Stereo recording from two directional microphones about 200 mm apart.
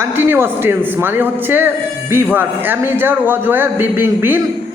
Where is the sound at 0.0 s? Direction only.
10° right (ahead or behind).